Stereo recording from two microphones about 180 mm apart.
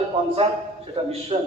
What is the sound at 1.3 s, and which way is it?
Speech, 30° right (ahead or behind).